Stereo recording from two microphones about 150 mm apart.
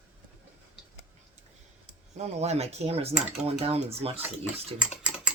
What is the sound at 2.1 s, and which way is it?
Dishes, 45° right (ahead or behind).